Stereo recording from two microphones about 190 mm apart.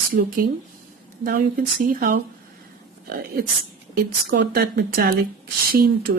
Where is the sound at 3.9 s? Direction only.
55° right (ahead or behind).